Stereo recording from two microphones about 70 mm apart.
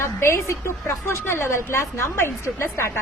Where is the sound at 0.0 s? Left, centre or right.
Left.